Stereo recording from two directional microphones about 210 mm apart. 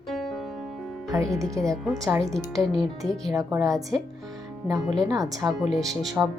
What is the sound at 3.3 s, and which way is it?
Speech, 15° right (ahead or behind).